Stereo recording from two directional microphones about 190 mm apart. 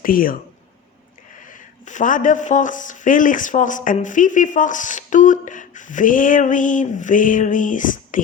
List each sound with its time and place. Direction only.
0.0 s speech: 50° left (ahead or behind)
1.4 s speech: 45° left (ahead or behind)